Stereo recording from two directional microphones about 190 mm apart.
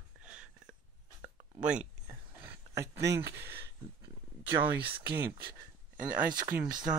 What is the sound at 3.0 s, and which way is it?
Speech, 60° right (ahead or behind).